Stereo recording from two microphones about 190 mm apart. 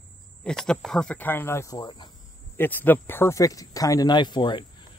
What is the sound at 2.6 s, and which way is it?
Speech, 10° left (ahead or behind).